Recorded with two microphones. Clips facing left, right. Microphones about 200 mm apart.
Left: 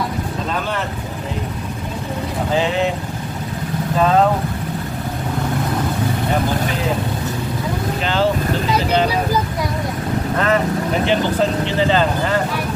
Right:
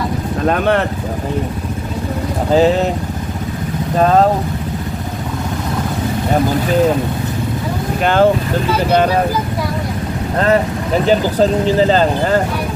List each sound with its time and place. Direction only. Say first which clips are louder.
0.5 s speech: right 11 dB; 60° right (ahead or behind)
2.5 s speech: right 7 dB; 40° right (ahead or behind)
4.0 s speech: right 3 dB; 40° right (ahead or behind)
8.0 s speech: right 7 dB; 50° right (ahead or behind)
10.3 s speech: right 4 dB; 35° right (ahead or behind)